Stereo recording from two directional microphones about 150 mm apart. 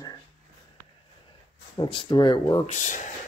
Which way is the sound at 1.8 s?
30° left (ahead or behind).